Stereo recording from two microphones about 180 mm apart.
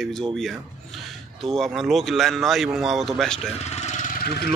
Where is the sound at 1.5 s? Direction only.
Centre (ahead or behind).